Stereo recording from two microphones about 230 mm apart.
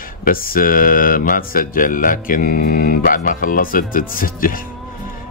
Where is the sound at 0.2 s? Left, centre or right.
Left.